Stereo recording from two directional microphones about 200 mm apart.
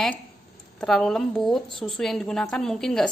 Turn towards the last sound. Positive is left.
turn(degrees=0)  # may be behind; listen again after turning